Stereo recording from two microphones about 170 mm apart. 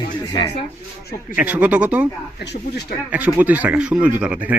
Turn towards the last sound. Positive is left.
turn(degrees=-10)  # may be behind; listen again after turning